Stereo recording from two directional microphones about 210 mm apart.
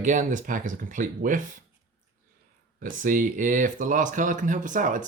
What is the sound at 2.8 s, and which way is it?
Speech, 40° right (ahead or behind).